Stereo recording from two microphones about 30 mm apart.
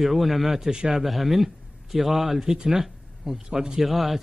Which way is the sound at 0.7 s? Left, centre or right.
Right.